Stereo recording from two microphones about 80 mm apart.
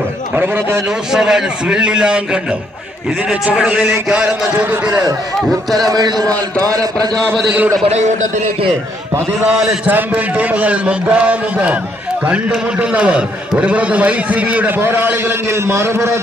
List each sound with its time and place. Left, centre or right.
0.4 s a man's voice: right
0.8 s a man's voice: centre; by 5.0 s right
5.8 s a man's voice: right
9.4 s a man's voice: centre
9.8 s a man's voice: right